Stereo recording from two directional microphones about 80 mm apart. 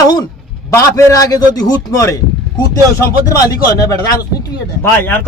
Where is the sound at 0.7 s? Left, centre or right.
Left.